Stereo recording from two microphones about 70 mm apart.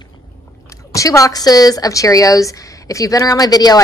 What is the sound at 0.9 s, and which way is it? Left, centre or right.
A woman's voice, left.